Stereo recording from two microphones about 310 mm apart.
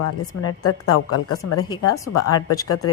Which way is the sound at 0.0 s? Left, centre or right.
Left.